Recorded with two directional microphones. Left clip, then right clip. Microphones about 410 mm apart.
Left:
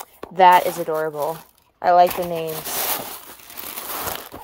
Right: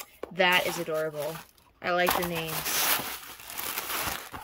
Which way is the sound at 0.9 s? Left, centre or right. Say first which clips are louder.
Left 7 dB; centre.